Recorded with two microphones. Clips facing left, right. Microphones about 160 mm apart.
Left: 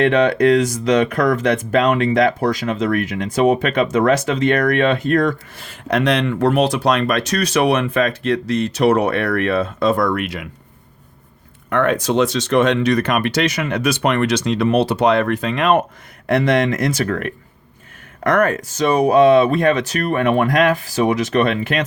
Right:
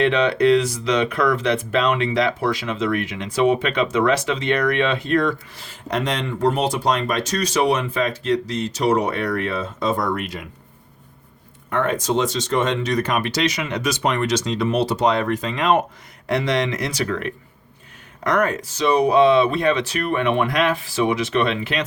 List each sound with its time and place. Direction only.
0.0 s speech: 50° left (ahead or behind); by 10.5 s 75° left (ahead or behind)
11.7 s speech: 70° left (ahead or behind); by 21.8 s 50° left (ahead or behind)